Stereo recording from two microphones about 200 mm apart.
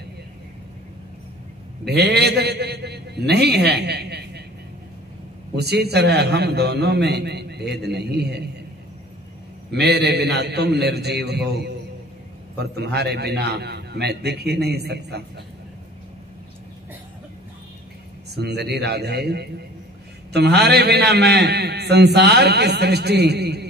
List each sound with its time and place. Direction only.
1.9 s a man's voice: 55° right (ahead or behind)
5.6 s a man's voice: 55° right (ahead or behind)
9.7 s a man's voice: 55° right (ahead or behind)
12.7 s a man's voice: 55° right (ahead or behind)
18.3 s a man's voice: 55° right (ahead or behind)